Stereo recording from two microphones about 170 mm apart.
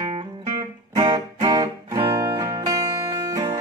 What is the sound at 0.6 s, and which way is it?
Music, 20° right (ahead or behind).